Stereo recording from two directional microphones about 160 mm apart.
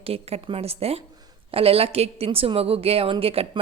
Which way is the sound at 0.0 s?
40° right (ahead or behind).